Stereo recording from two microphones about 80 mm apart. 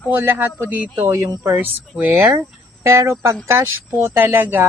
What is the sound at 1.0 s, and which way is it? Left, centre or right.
Speech, right.